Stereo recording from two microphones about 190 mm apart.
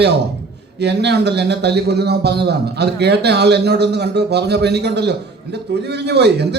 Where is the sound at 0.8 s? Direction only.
65° right (ahead or behind).